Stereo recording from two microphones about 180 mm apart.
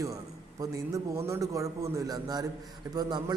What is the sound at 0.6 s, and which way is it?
A man's voice, 15° right (ahead or behind).